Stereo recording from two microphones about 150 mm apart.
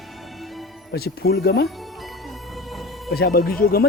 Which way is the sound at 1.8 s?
Centre (ahead or behind).